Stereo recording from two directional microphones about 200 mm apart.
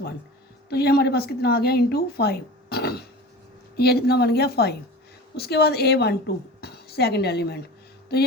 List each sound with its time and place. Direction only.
0.7 s a woman's voice: 55° left (ahead or behind)